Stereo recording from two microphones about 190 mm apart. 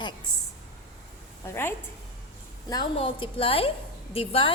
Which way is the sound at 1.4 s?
10° left (ahead or behind).